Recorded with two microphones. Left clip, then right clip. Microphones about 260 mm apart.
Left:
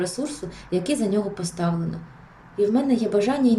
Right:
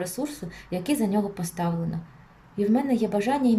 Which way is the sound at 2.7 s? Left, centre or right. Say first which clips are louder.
Left 3 dB; right.